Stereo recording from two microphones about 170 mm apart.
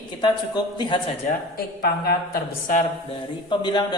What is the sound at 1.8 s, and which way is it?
Speech, 65° left (ahead or behind).